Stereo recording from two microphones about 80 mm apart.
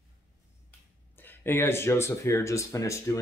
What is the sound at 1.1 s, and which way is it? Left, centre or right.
A man's voice, left.